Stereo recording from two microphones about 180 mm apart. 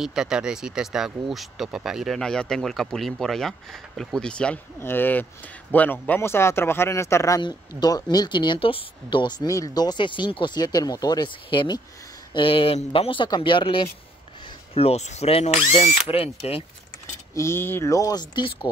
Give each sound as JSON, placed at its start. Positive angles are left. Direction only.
{"t": 0.0, "sound": "speech", "side_deg": -5}
{"t": 17.3, "sound": "speech", "side_deg": 15}